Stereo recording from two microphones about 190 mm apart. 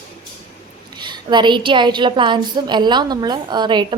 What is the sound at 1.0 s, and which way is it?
A woman's voice, 25° right (ahead or behind).